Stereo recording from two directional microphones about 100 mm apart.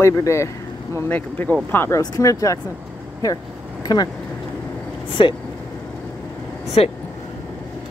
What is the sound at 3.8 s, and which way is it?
Speech, 45° left (ahead or behind).